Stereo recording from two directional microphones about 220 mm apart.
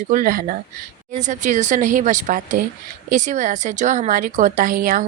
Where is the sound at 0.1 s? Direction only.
40° right (ahead or behind).